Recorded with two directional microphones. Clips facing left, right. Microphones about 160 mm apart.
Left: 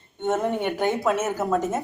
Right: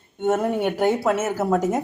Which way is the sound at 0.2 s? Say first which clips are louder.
Right 3 dB; 10° right (ahead or behind).